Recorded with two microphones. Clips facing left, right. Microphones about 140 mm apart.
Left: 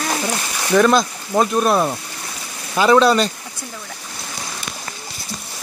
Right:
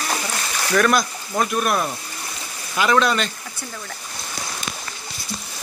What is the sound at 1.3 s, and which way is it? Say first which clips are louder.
Speech: left 5 dB; 30° left (ahead or behind).